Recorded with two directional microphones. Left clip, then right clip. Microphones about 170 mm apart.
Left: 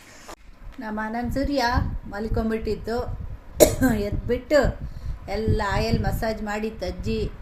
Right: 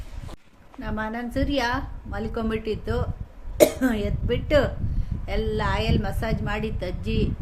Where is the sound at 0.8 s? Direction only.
10° left (ahead or behind).